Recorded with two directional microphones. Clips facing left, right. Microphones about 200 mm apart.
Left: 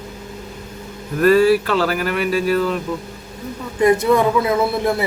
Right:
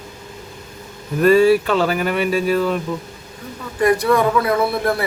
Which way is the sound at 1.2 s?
Centre (ahead or behind).